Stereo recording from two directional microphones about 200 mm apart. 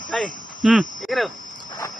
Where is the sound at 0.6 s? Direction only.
Centre (ahead or behind).